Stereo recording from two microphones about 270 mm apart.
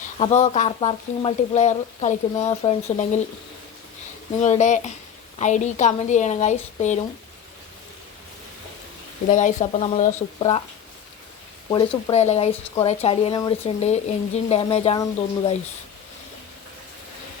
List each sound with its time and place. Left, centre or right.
0.2 s speech: left
4.4 s speech: left
9.3 s speech: left
11.7 s speech: centre